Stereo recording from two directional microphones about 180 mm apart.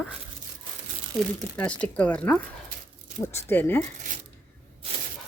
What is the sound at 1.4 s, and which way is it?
Speech, 5° left (ahead or behind).